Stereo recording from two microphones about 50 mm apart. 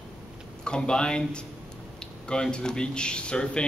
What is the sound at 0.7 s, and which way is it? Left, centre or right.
Speech, centre.